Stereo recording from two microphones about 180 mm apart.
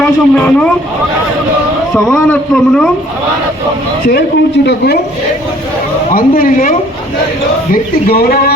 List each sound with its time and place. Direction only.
0.0 s speech: 5° left (ahead or behind)
2.1 s speech: 10° left (ahead or behind)
4.0 s speech: 65° left (ahead or behind)
6.1 s speech: 50° left (ahead or behind)